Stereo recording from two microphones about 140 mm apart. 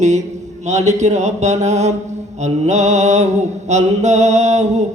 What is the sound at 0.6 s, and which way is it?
Mantra, 55° right (ahead or behind).